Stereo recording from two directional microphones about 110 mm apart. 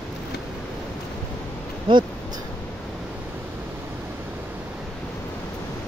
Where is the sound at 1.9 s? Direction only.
50° right (ahead or behind).